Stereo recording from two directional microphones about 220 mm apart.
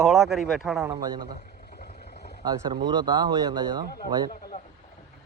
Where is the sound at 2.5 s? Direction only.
20° right (ahead or behind).